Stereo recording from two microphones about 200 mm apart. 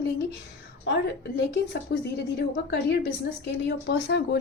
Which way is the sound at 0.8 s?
60° left (ahead or behind).